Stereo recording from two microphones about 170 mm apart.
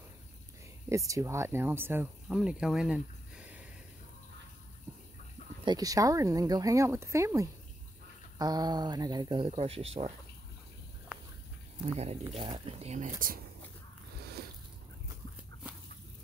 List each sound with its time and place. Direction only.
0.8 s speech: 20° right (ahead or behind)
5.7 s speech: 20° right (ahead or behind); by 10.1 s 35° right (ahead or behind)
11.1 s a sound: 5° right (ahead or behind)
12.0 s speech: 35° right (ahead or behind)